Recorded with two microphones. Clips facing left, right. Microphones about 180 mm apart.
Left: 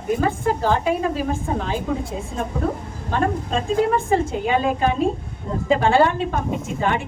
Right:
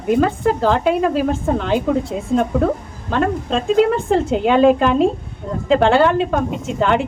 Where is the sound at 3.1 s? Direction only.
75° right (ahead or behind).